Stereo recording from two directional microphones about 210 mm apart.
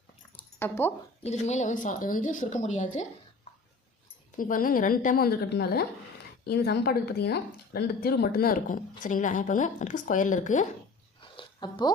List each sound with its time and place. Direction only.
0.6 s speech: 10° left (ahead or behind)
1.2 s speech: 30° left (ahead or behind)
4.4 s speech: 40° left (ahead or behind)
11.2 s a sound: 25° left (ahead or behind)